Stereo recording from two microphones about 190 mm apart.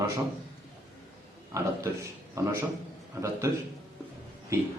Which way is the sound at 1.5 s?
15° right (ahead or behind).